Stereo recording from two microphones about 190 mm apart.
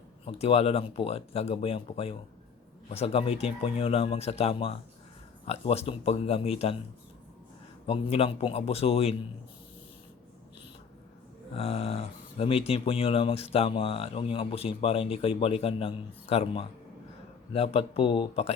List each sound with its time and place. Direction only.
0.3 s speech: 30° left (ahead or behind)
7.9 s speech: 30° left (ahead or behind)
11.5 s speech: 30° left (ahead or behind)